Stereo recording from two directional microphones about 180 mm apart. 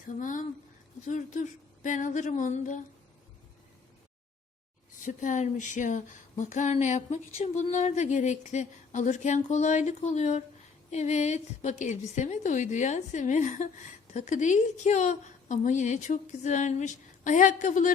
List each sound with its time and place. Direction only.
0.2 s a woman's voice: 45° left (ahead or behind)
5.0 s a sound: 45° left (ahead or behind)
14.1 s a woman's voice: 40° left (ahead or behind)